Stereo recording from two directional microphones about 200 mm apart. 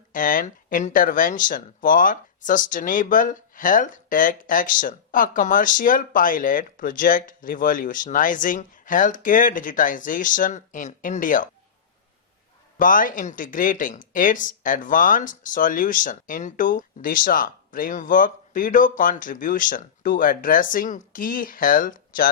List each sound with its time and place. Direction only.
0.1 s speech: 40° left (ahead or behind)
12.8 s speech: 40° left (ahead or behind)